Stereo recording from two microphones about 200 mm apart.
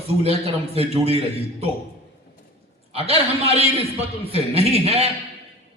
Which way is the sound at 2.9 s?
30° right (ahead or behind).